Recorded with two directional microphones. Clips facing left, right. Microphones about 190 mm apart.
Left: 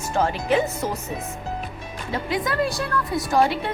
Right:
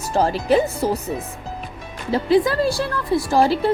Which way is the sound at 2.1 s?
30° right (ahead or behind).